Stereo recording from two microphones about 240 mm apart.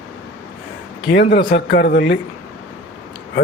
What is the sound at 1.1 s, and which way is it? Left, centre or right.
Speech, left.